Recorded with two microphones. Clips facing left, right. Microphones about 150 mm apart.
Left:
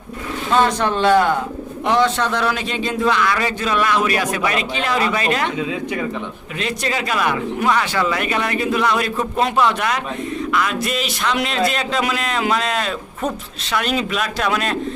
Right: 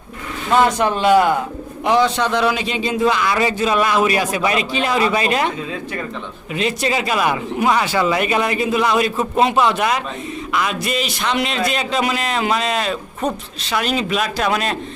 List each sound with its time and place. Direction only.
0.6 s speech: 10° right (ahead or behind)
3.0 s speech: 15° right (ahead or behind)
6.8 s speech: 15° right (ahead or behind)